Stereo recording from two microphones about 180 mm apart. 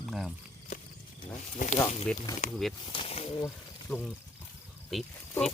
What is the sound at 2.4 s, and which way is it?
Speech, 45° left (ahead or behind).